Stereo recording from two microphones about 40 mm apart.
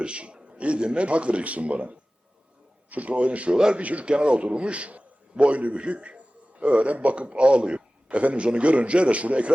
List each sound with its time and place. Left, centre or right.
0.0 s a man's voice: right
3.5 s a man's voice: centre
3.8 s a man's voice: right